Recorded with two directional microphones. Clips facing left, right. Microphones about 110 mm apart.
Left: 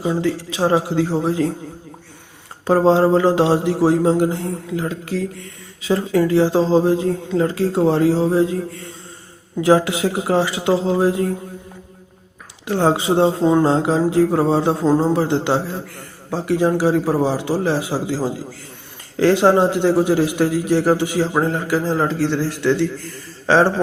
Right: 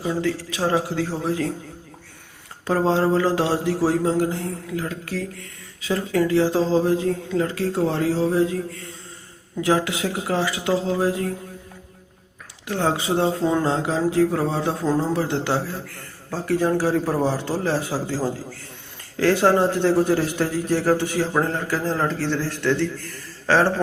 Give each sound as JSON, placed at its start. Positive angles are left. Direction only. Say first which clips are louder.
{"t": 0.0, "sound": "speech", "louder": "left 4 dB", "side_deg": 25}
{"t": 2.6, "sound": "speech", "louder": "left 6 dB", "side_deg": 30}
{"t": 9.6, "sound": "speech", "louder": "left 6 dB", "side_deg": 25}
{"t": 12.6, "sound": "a man's voice", "louder": "left 6 dB", "side_deg": 30}